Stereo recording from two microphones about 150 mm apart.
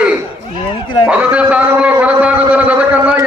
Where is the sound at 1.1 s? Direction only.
10° right (ahead or behind).